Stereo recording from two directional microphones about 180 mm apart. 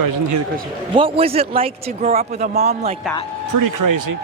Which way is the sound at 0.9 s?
30° right (ahead or behind).